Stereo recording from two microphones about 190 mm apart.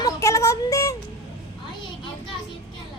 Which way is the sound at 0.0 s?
15° left (ahead or behind).